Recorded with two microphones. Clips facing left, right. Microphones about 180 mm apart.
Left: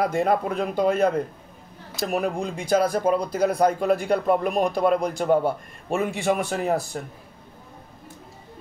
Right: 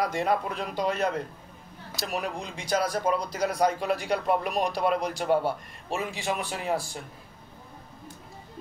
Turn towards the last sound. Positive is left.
turn(degrees=45)  # may be behind; listen again after turning